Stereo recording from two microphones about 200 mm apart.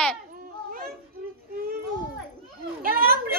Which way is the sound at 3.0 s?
50° right (ahead or behind).